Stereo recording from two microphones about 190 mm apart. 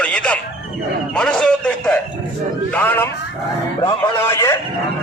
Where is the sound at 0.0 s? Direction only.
5° left (ahead or behind).